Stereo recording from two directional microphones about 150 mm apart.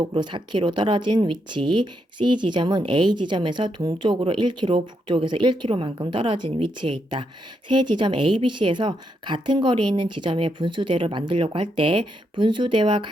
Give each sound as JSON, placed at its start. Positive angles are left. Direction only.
{"t": 0.0, "sound": "speech", "side_deg": -30}